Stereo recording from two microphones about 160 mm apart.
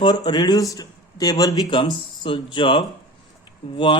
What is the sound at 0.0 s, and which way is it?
A man's voice, 25° left (ahead or behind).